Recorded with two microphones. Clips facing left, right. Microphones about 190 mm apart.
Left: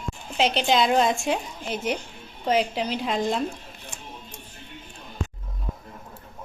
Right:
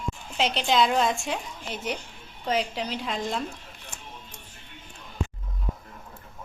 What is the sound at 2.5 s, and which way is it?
Speech, 5° left (ahead or behind).